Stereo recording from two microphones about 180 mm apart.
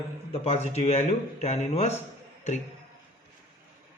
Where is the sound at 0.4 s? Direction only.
35° left (ahead or behind).